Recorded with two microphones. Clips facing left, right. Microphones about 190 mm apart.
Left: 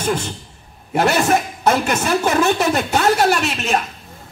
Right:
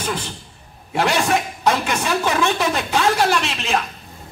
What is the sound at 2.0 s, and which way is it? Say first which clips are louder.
Speech: left 3 dB; 45° left (ahead or behind).